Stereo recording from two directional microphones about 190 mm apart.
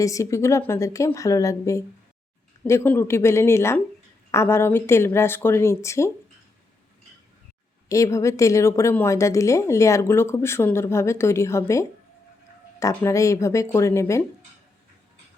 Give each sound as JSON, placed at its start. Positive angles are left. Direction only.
{"t": 0.0, "sound": "speech", "side_deg": 15}
{"t": 7.9, "sound": "speech", "side_deg": 15}